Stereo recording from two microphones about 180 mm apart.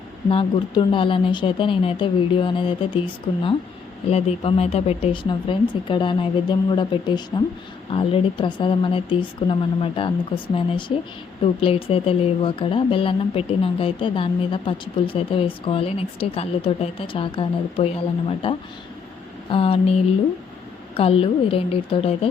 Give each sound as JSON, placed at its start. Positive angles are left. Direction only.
{"t": 0.3, "sound": "speech", "side_deg": 30}
{"t": 4.1, "sound": "a woman's voice", "side_deg": 35}